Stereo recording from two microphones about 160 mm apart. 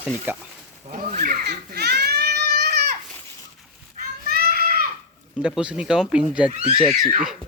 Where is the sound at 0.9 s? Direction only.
55° right (ahead or behind); by 2.7 s 75° right (ahead or behind).